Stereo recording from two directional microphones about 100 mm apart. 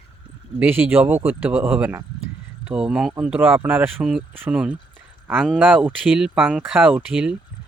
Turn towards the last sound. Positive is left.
turn(degrees=-10)  # may be behind; listen again after turning